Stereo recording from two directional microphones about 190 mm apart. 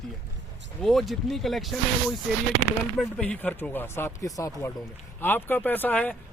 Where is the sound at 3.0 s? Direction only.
5° left (ahead or behind).